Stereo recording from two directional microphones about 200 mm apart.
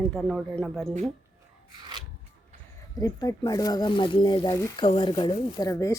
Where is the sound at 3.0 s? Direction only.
15° left (ahead or behind).